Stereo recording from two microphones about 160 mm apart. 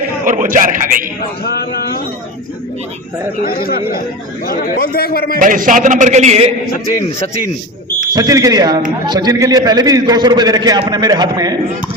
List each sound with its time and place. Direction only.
0.3 s speech: 55° right (ahead or behind)
3.4 s a man's voice: 65° left (ahead or behind)
5.4 s a man's voice: 55° right (ahead or behind)
8.1 s a man's voice: 25° right (ahead or behind)